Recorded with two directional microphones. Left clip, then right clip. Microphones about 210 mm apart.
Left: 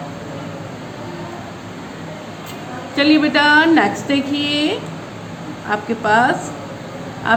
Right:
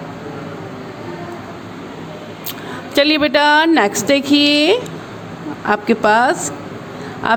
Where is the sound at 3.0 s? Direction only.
50° right (ahead or behind).